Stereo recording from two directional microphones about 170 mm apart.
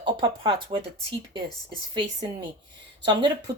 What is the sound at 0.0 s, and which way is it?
Speech, 30° right (ahead or behind).